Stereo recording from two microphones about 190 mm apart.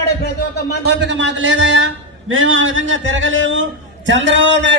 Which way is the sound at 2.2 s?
90° right.